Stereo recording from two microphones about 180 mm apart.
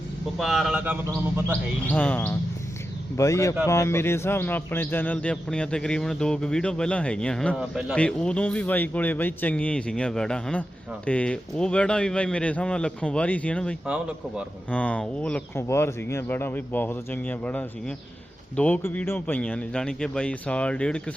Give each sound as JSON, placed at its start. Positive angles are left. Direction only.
{"t": 0.3, "sound": "a man's voice", "side_deg": 0}
{"t": 1.9, "sound": "a man's voice", "side_deg": 10}
{"t": 13.8, "sound": "a man's voice", "side_deg": -5}
{"t": 14.7, "sound": "a man's voice", "side_deg": 5}